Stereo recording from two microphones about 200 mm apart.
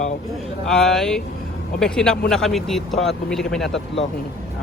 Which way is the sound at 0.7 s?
Centre (ahead or behind).